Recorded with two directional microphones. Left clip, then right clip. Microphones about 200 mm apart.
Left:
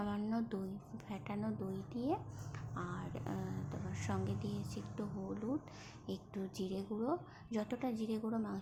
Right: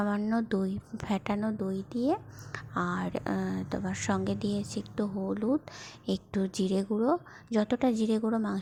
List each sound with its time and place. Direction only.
0.0 s speech: 30° right (ahead or behind)